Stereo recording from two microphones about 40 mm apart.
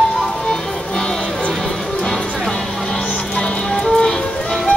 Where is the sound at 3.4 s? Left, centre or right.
Left.